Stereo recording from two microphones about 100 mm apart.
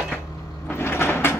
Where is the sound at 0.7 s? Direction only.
25° left (ahead or behind).